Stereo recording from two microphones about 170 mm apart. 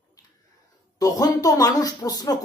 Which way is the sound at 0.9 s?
20° left (ahead or behind).